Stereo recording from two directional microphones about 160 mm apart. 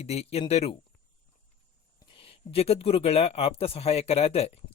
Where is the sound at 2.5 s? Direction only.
40° left (ahead or behind).